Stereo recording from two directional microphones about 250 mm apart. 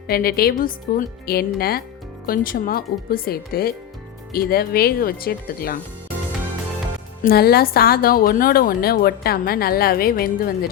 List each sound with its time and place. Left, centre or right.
0.1 s a woman's voice: left
7.2 s a woman's voice: left